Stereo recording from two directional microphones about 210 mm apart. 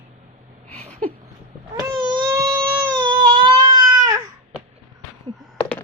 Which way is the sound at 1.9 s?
15° right (ahead or behind).